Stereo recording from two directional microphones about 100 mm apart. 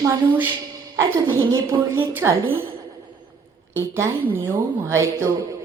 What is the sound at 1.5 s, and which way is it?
Speech, 25° right (ahead or behind).